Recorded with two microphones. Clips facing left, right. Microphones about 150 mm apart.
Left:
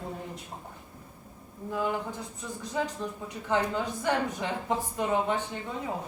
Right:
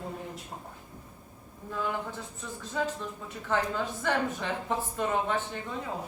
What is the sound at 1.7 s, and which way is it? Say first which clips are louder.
A woman's voice: left 2 dB; 15° left (ahead or behind).